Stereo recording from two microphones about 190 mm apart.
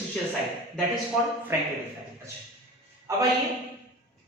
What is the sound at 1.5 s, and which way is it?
Speech, 10° right (ahead or behind).